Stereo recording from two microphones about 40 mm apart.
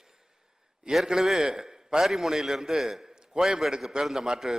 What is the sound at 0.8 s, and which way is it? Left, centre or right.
A man's voice, centre.